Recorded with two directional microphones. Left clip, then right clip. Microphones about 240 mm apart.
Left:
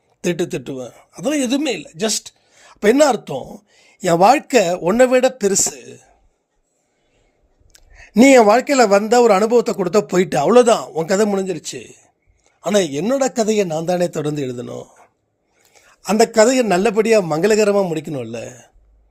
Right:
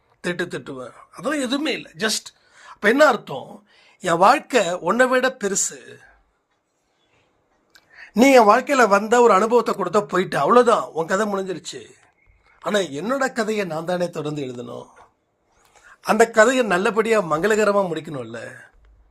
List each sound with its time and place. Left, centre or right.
0.2 s speech: left
7.7 s speech: left